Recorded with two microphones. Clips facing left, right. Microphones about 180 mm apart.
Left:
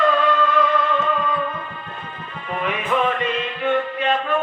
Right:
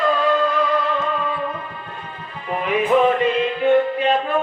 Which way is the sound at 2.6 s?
30° right (ahead or behind).